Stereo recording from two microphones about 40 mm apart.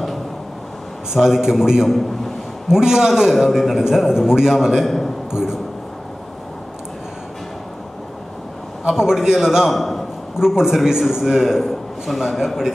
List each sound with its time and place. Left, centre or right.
1.1 s a man's voice: centre
1.9 s a man's voice: centre
2.7 s a man's voice: centre
3.3 s a man's voice: centre
4.8 s a man's voice: centre
5.3 s a man's voice: centre
8.8 s a man's voice: centre
9.7 s a man's voice: centre
10.4 s a man's voice: centre